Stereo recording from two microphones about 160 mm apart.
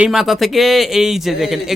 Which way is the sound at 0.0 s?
Centre (ahead or behind).